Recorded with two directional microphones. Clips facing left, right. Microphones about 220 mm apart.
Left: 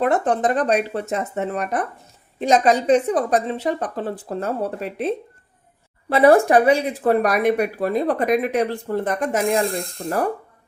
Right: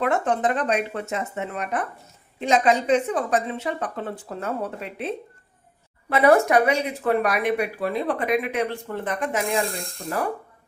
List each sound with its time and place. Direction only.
0.0 s speech: 35° left (ahead or behind)
10.0 s speech: 30° left (ahead or behind)